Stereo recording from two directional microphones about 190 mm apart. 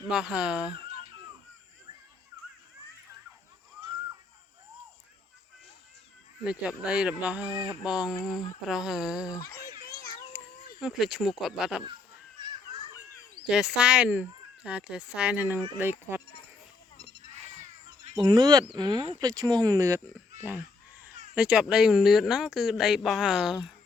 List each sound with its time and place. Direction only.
0.1 s speech: 5° right (ahead or behind)
6.4 s speech: 5° right (ahead or behind)
7.6 s speech: 25° left (ahead or behind)
7.9 s speech: 5° right (ahead or behind)
9.2 s speech: 20° left (ahead or behind)
10.3 s a sound: 15° right (ahead or behind)
10.8 s speech: centre (ahead or behind)
13.5 s speech: 5° right (ahead or behind)
18.1 s speech: 20° right (ahead or behind)
21.3 s speech: 5° right (ahead or behind)